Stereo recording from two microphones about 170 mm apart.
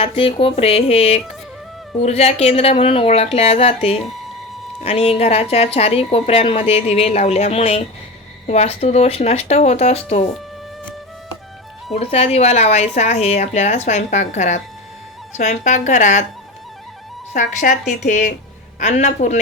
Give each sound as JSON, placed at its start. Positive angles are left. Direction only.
{"t": 0.0, "sound": "a woman's voice", "side_deg": 35}
{"t": 11.9, "sound": "a woman's voice", "side_deg": 35}
{"t": 17.3, "sound": "speech", "side_deg": 50}